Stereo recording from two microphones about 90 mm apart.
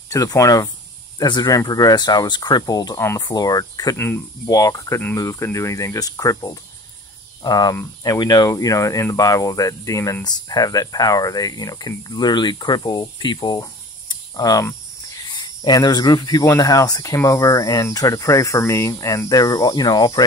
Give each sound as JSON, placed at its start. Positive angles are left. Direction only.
{"t": 0.1, "sound": "speech", "side_deg": 40}
{"t": 1.2, "sound": "speech", "side_deg": 50}
{"t": 3.9, "sound": "speech", "side_deg": 25}
{"t": 4.5, "sound": "speech", "side_deg": 40}
{"t": 14.0, "sound": "a sound", "side_deg": 45}
{"t": 15.3, "sound": "speech", "side_deg": 50}
{"t": 16.4, "sound": "speech", "side_deg": 35}